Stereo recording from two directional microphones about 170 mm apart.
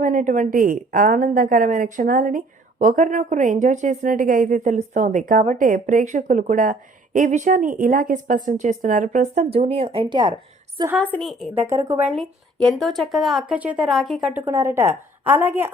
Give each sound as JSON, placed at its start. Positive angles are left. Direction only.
{"t": 0.0, "sound": "a woman's voice", "side_deg": -50}
{"t": 11.0, "sound": "a woman's voice", "side_deg": 5}
{"t": 11.6, "sound": "a woman's voice", "side_deg": -15}
{"t": 12.1, "sound": "a woman's voice", "side_deg": 0}
{"t": 14.4, "sound": "a woman's voice", "side_deg": -15}